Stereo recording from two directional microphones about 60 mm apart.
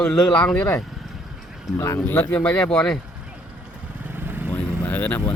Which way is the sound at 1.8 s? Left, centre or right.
Left.